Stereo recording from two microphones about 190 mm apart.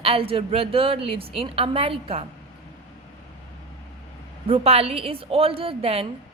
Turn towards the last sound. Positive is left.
turn(degrees=-30)  # may be behind; listen again after turning